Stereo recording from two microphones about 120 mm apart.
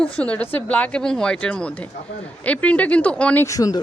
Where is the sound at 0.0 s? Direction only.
10° left (ahead or behind).